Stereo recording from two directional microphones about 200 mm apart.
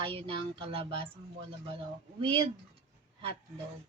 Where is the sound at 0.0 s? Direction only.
25° right (ahead or behind).